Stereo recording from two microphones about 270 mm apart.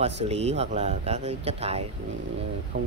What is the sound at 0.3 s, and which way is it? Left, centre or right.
Speech, right.